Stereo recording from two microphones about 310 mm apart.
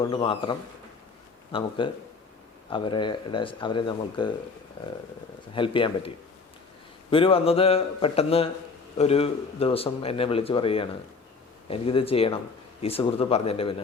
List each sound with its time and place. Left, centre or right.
0.0 s speech: centre
1.5 s speech: centre
5.5 s speech: centre
7.1 s speech: centre